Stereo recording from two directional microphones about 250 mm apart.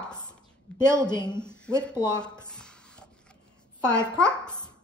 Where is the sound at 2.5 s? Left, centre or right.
Centre.